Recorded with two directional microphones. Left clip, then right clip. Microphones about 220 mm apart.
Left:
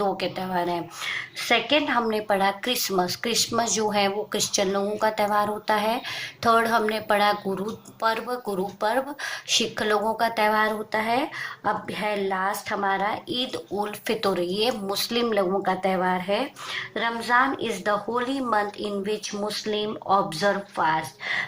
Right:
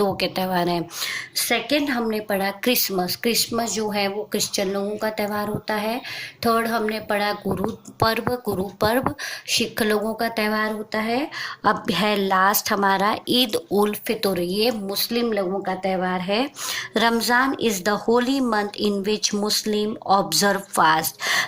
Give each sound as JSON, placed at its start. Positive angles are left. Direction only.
{"t": 0.0, "sound": "speech", "side_deg": -45}
{"t": 1.8, "sound": "speech", "side_deg": 0}
{"t": 7.5, "sound": "speech", "side_deg": -45}
{"t": 10.0, "sound": "speech", "side_deg": 0}
{"t": 11.6, "sound": "speech", "side_deg": -45}
{"t": 14.7, "sound": "speech", "side_deg": 0}
{"t": 16.0, "sound": "speech", "side_deg": -40}